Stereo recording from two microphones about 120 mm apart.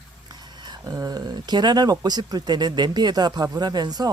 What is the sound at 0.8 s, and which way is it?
Speech, 30° right (ahead or behind).